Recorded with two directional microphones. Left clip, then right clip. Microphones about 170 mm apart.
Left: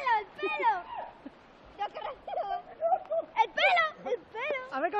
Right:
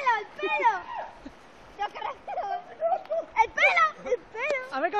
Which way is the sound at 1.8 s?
35° left (ahead or behind).